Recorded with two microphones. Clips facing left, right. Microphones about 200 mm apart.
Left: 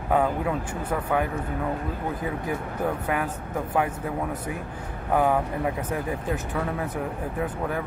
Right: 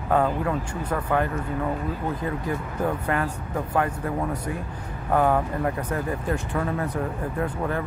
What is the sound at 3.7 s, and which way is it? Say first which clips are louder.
Speech: right 1 dB; 5° left (ahead or behind).